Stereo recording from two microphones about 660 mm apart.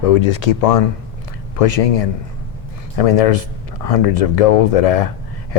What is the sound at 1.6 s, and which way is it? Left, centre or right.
Speech, left.